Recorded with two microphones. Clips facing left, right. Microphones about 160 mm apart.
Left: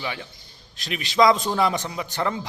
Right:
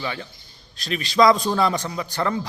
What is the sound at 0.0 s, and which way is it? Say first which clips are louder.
A man's voice: right 2 dB; 15° left (ahead or behind).